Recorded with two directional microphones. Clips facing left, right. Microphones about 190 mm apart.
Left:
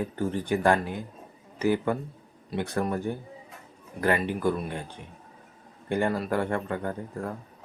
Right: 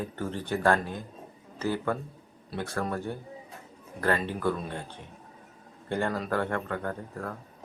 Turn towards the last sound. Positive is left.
turn(degrees=15)  # may be behind; listen again after turning